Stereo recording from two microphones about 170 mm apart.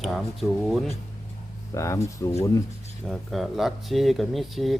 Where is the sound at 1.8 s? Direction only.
15° left (ahead or behind).